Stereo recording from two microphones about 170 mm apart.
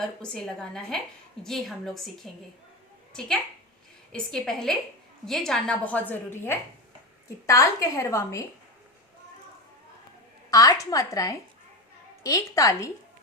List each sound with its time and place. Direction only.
0.0 s a woman's voice: 5° left (ahead or behind)
10.5 s a woman's voice: 20° left (ahead or behind)